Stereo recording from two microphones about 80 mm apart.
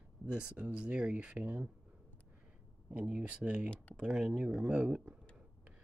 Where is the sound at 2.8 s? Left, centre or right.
Centre.